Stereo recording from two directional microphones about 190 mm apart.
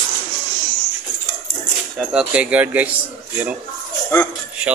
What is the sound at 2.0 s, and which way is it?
Speech, 5° right (ahead or behind).